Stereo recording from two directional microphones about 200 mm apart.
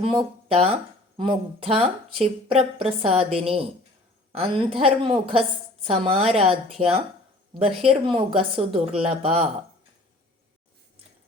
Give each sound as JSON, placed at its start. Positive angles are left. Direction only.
{"t": 0.0, "sound": "speech", "side_deg": -25}